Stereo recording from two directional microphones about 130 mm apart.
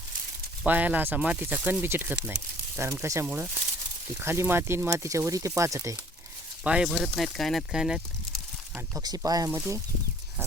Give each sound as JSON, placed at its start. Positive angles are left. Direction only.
{"t": 0.6, "sound": "speech", "side_deg": -10}
{"t": 6.7, "sound": "speech", "side_deg": -5}
{"t": 9.0, "sound": "speech", "side_deg": -30}